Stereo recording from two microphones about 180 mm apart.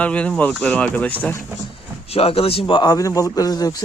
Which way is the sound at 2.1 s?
35° left (ahead or behind).